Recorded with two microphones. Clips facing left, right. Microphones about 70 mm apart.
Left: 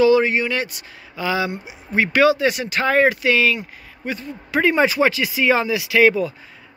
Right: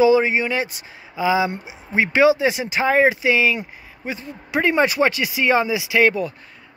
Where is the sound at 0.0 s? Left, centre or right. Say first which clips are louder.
Even; right.